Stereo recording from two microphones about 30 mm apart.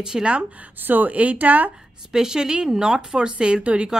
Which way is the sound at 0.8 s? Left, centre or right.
Right.